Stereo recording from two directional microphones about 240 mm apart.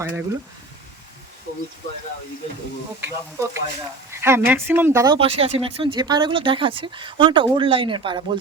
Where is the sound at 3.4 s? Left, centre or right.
Centre.